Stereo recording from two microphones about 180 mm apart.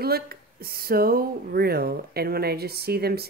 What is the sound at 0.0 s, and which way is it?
Speech, 60° right (ahead or behind).